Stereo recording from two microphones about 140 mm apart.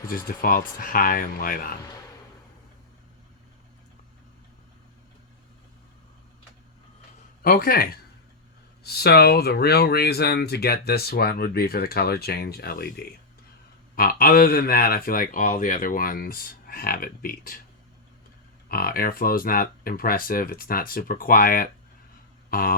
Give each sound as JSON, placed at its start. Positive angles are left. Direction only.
{"t": 0.1, "sound": "speech", "side_deg": 90}
{"t": 7.4, "sound": "speech", "side_deg": 90}
{"t": 9.8, "sound": "speech", "side_deg": 90}
{"t": 18.7, "sound": "speech", "side_deg": 90}
{"t": 22.4, "sound": "a sound", "side_deg": 90}